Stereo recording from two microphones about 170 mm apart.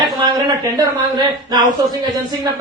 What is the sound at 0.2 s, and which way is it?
A man's voice, 25° right (ahead or behind).